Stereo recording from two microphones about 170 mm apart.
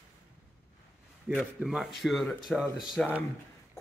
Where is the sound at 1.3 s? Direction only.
Centre (ahead or behind).